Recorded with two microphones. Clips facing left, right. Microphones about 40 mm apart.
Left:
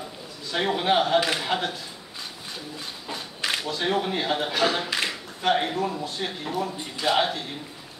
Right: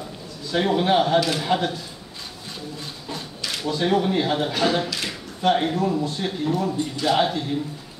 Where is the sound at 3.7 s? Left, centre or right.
Centre.